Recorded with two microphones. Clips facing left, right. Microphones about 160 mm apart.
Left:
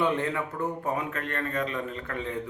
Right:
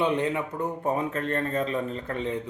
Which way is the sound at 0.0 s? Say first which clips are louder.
Right 2 dB; 20° right (ahead or behind).